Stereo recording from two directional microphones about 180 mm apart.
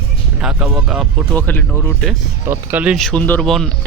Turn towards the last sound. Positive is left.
turn(degrees=0)  # may be behind; listen again after turning